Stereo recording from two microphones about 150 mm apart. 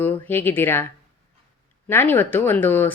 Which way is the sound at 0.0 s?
15° left (ahead or behind).